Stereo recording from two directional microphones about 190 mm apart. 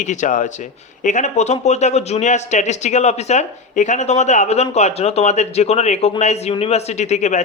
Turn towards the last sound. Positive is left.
turn(degrees=40)  # may be behind; listen again after turning